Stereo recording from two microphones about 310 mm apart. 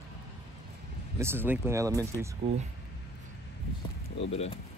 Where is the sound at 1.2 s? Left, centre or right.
Centre.